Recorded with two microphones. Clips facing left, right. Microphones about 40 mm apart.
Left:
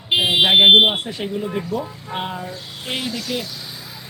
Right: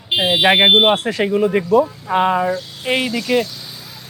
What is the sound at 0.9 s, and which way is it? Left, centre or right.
Speech, right.